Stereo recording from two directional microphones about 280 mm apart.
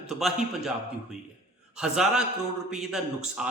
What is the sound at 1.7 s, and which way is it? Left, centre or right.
A man's voice, centre.